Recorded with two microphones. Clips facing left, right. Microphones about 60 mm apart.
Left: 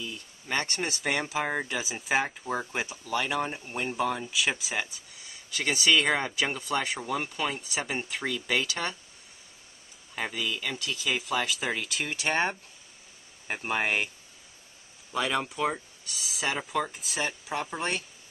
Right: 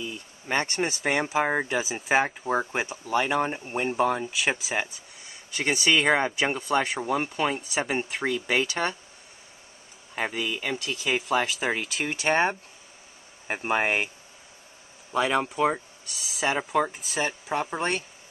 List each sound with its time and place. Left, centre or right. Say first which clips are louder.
0.0 s speech: right 3 dB; right; by 2.7 s centre
2.9 s speech: right 6 dB; right
3.9 s speech: right 4 dB; centre
5.5 s speech: right 3 dB; right
5.9 s speech: right 2 dB; centre
6.1 s speech: right 4 dB; right
6.5 s speech: right 5 dB; centre
7.8 s speech: right 4 dB; centre
10.1 s speech: right 3 dB; centre
10.8 s speech: right 3 dB; centre
13.5 s speech: right 4 dB; centre
15.1 s speech: right 5 dB; centre